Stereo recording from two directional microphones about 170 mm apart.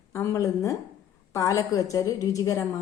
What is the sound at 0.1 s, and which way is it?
A woman's voice, 15° left (ahead or behind).